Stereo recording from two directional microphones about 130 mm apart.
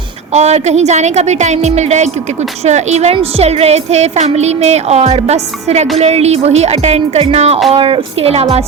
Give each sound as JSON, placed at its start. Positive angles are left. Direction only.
{"t": 0.3, "sound": "a woman's voice", "side_deg": -60}
{"t": 7.7, "sound": "a woman's voice", "side_deg": -40}